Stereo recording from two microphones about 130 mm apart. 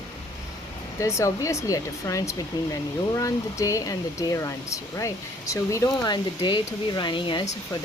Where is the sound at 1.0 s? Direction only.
25° left (ahead or behind).